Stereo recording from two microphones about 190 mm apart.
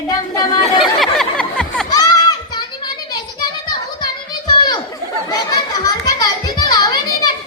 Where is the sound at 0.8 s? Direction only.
Centre (ahead or behind).